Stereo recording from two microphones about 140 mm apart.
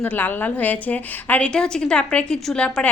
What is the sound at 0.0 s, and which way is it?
A woman's voice, 10° left (ahead or behind).